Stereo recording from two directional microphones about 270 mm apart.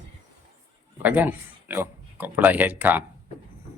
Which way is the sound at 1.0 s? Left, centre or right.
Centre.